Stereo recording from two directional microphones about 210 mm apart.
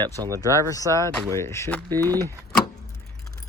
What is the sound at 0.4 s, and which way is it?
Speech, 15° left (ahead or behind).